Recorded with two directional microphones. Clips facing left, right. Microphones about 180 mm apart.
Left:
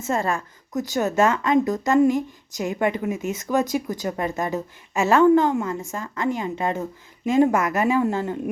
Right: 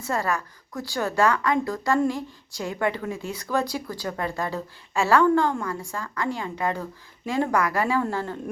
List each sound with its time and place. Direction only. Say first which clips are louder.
0.0 s a woman's voice: left 2 dB; 25° left (ahead or behind)